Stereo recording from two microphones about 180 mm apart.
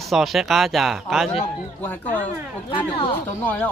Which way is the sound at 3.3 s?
10° left (ahead or behind).